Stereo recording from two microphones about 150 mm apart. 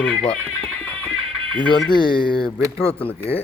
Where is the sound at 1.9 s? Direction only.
30° left (ahead or behind).